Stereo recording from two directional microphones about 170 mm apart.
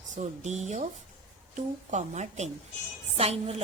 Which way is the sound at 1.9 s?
45° right (ahead or behind).